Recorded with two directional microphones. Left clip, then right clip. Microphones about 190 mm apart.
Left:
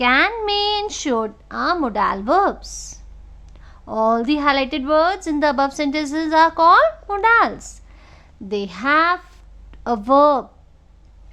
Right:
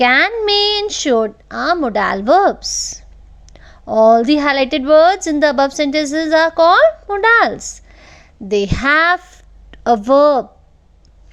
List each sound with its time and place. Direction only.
0.0 s a woman's voice: 30° right (ahead or behind)